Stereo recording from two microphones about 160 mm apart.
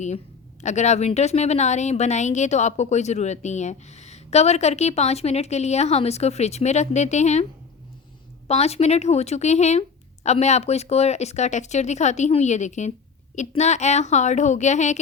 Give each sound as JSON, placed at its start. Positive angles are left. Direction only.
{"t": 0.6, "sound": "speech", "side_deg": 45}
{"t": 8.4, "sound": "speech", "side_deg": 40}